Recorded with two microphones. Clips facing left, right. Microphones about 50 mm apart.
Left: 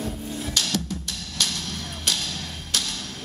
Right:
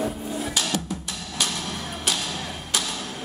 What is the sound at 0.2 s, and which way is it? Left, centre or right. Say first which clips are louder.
Music: right 2 dB; centre.